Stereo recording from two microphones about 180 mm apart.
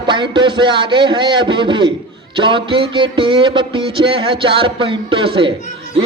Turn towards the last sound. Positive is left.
turn(degrees=40)  # may be behind; listen again after turning